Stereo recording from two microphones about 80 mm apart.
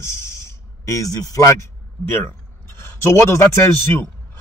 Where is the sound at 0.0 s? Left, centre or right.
Left.